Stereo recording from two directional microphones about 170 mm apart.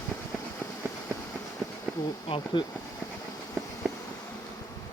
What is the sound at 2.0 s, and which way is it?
Insect, 25° left (ahead or behind).